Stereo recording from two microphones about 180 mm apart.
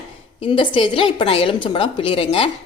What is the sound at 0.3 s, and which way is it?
A woman's voice, 30° left (ahead or behind).